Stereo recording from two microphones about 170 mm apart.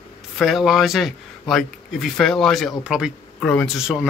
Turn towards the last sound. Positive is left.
turn(degrees=-5)  # may be behind; listen again after turning